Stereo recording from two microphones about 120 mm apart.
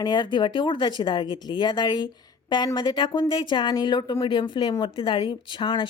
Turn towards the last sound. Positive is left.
turn(degrees=40)  # may be behind; listen again after turning